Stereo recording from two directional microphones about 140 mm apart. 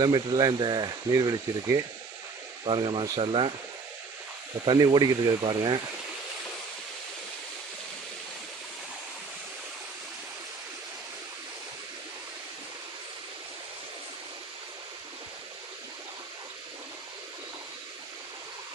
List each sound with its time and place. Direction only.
0.0 s speech: 30° right (ahead or behind)
2.6 s speech: 35° right (ahead or behind)
4.6 s speech: 30° right (ahead or behind)